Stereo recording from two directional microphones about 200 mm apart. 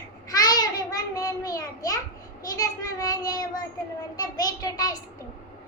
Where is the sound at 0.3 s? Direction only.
20° left (ahead or behind).